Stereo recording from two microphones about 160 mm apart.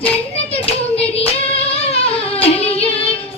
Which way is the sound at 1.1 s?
40° left (ahead or behind).